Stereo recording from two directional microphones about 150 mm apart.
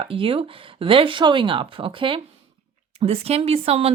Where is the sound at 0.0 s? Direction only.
35° right (ahead or behind).